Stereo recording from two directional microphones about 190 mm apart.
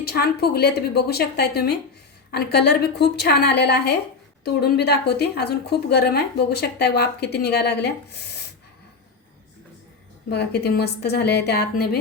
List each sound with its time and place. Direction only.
0.0 s a woman's voice: 55° left (ahead or behind)
10.2 s a woman's voice: 60° left (ahead or behind)